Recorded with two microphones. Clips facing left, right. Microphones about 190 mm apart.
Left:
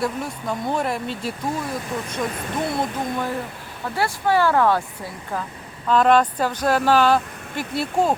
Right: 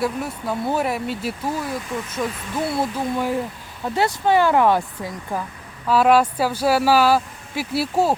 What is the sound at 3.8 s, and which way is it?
Speech, 20° right (ahead or behind).